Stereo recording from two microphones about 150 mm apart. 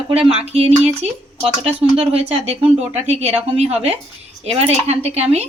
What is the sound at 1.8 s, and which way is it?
A woman's voice, 40° right (ahead or behind).